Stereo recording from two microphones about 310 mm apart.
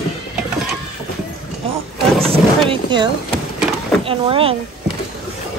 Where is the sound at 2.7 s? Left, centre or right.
Centre.